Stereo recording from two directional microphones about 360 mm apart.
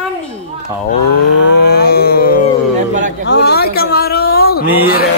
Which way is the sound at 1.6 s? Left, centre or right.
Left.